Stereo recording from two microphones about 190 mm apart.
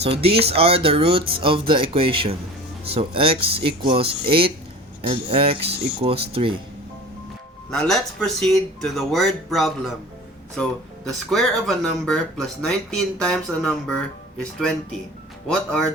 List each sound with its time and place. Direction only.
0.0 s speech: 30° right (ahead or behind)
7.7 s speech: 5° left (ahead or behind)